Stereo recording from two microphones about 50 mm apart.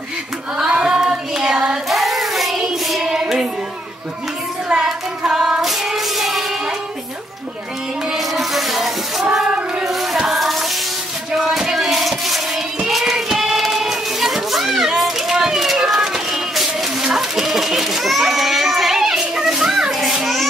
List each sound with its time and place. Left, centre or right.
0.7 s child singing: centre
4.8 s child singing: centre
8.1 s music: centre
9.8 s child singing: centre
11.3 s music: centre
12.8 s child singing: centre